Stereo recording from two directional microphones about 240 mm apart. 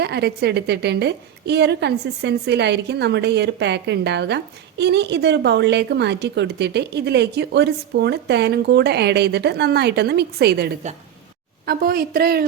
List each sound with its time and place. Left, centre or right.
0.0 s a woman's voice: right